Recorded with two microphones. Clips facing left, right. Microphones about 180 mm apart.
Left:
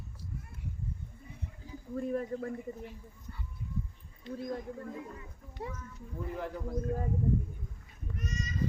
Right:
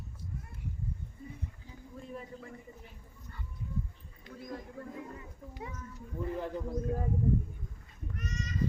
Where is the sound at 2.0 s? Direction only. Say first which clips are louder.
Left 11 dB; 55° left (ahead or behind).